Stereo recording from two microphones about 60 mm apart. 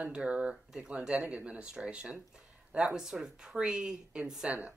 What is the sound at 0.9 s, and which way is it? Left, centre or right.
A woman's voice, centre.